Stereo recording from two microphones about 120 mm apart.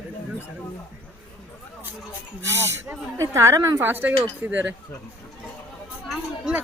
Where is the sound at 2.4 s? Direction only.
20° right (ahead or behind).